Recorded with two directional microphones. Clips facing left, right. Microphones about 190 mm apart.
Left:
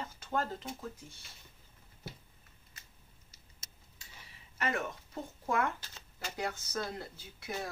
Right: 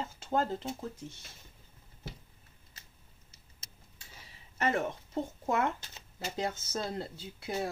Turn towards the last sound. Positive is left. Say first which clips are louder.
# right 5 dB
turn(degrees=-25)  # may be behind; listen again after turning